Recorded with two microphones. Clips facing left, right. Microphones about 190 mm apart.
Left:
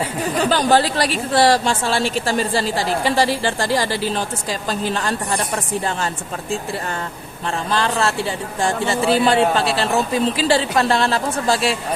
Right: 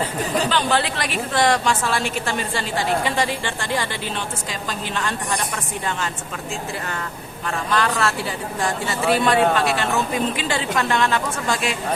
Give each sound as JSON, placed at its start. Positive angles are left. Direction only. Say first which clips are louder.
{"t": 0.5, "sound": "a woman's voice", "louder": "left 5 dB", "side_deg": 40}
{"t": 7.7, "sound": "a woman's voice", "louder": "left 1 dB", "side_deg": 30}